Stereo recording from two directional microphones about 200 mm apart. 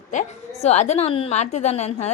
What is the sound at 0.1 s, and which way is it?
A woman's voice, 35° left (ahead or behind).